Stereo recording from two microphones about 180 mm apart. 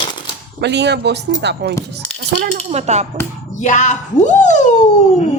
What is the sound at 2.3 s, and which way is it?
Speech, 40° right (ahead or behind).